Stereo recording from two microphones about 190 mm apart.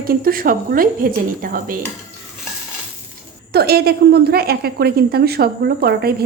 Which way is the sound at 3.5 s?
55° right (ahead or behind).